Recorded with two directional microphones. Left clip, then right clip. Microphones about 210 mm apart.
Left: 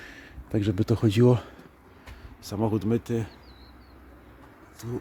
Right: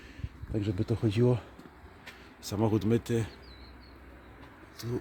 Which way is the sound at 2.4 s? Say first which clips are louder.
Left 2 dB; 5° left (ahead or behind).